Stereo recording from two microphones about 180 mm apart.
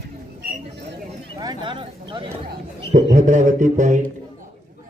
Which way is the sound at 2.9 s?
45° right (ahead or behind).